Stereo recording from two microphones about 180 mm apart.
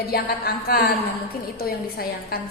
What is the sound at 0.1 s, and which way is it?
A woman's voice, 60° left (ahead or behind).